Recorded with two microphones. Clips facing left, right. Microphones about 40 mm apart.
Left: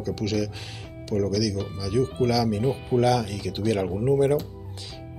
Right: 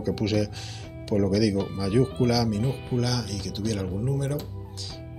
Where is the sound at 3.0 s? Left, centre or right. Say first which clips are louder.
Left 7 dB; left.